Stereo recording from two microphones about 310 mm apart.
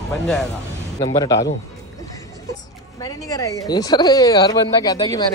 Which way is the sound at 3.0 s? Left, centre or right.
Centre.